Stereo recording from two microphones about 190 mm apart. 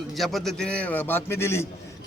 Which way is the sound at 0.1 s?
Centre (ahead or behind).